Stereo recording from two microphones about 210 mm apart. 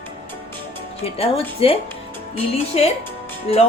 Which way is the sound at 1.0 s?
25° left (ahead or behind).